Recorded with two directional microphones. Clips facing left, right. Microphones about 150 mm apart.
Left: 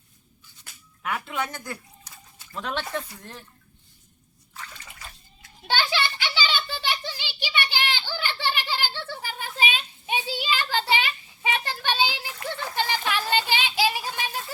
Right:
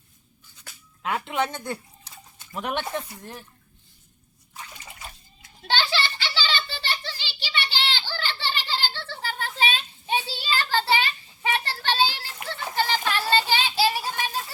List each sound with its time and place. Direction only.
1.0 s speech: 20° right (ahead or behind)
4.5 s bathtub: 20° right (ahead or behind)
5.6 s a sound: 10° left (ahead or behind)
13.3 s child singing: 15° left (ahead or behind)